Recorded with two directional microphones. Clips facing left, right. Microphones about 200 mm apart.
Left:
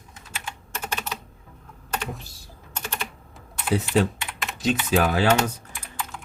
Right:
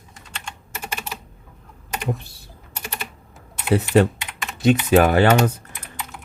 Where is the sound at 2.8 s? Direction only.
10° right (ahead or behind).